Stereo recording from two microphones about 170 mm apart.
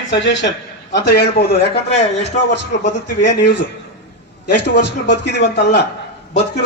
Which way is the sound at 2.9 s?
90° left.